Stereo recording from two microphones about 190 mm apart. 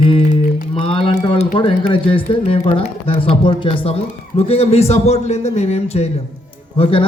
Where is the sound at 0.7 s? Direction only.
30° left (ahead or behind).